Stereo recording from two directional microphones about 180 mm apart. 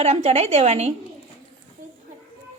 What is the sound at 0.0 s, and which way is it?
Speech, 40° right (ahead or behind).